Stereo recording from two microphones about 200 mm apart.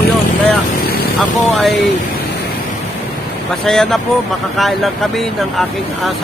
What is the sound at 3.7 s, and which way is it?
Speech, centre (ahead or behind).